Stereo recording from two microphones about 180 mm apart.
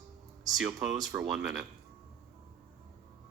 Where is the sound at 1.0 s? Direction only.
5° right (ahead or behind).